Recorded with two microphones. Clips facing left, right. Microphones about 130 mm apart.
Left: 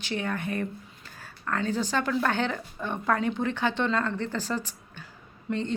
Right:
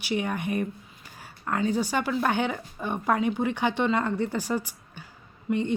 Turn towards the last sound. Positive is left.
turn(degrees=-10)  # may be behind; listen again after turning